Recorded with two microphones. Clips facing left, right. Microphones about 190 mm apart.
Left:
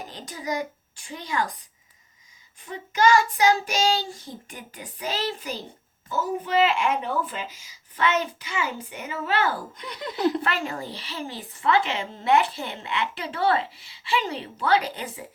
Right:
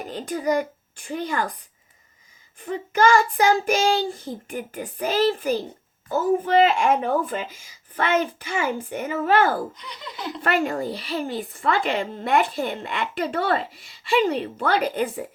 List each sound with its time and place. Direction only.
0.1 s speech: 55° right (ahead or behind)
2.6 s speech: 55° right (ahead or behind)
9.7 s speech: 50° left (ahead or behind)
10.4 s speech: 50° right (ahead or behind)